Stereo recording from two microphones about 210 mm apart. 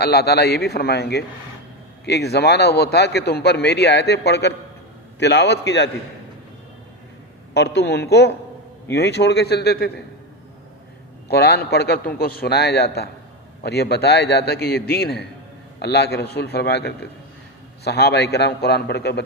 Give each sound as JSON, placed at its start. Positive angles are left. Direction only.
{"t": 0.0, "sound": "a man's voice", "side_deg": 50}
{"t": 7.5, "sound": "a man's voice", "side_deg": 55}
{"t": 11.3, "sound": "a man's voice", "side_deg": 50}